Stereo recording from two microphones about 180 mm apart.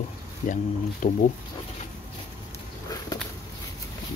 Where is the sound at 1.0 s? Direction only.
50° left (ahead or behind).